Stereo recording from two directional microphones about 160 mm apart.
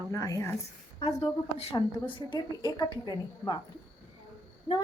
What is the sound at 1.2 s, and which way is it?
Speech, 40° left (ahead or behind).